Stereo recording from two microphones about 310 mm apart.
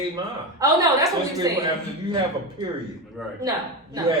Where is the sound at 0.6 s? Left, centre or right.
Centre.